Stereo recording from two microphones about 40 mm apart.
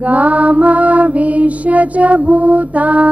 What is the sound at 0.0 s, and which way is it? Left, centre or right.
Mantra, right.